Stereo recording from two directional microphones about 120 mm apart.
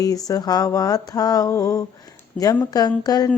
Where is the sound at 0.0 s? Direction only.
30° left (ahead or behind).